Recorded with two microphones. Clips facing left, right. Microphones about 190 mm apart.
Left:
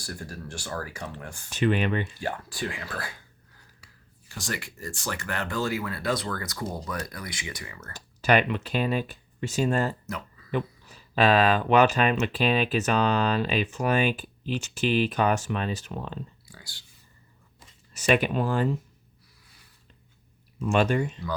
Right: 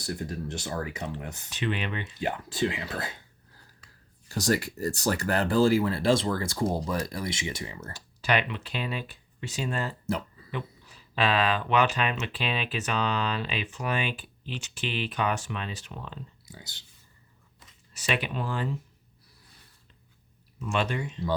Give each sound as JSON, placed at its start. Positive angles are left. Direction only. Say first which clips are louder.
{"t": 0.0, "sound": "speech", "louder": "right 5 dB", "side_deg": -20}
{"t": 1.5, "sound": "speech", "louder": "left 7 dB", "side_deg": 45}
{"t": 2.1, "sound": "speech", "louder": "right 2 dB", "side_deg": -20}
{"t": 4.3, "sound": "speech", "louder": "right 9 dB", "side_deg": -40}
{"t": 7.9, "sound": "speech", "louder": "left 5 dB", "side_deg": 50}
{"t": 10.1, "sound": "a sound", "louder": "right 5 dB", "side_deg": -30}
{"t": 10.5, "sound": "speech", "louder": "left 7 dB", "side_deg": 45}
{"t": 16.5, "sound": "speech", "louder": "right 3 dB", "side_deg": -20}
{"t": 17.9, "sound": "speech", "louder": "left 7 dB", "side_deg": 45}
{"t": 20.6, "sound": "speech", "louder": "left 6 dB", "side_deg": 45}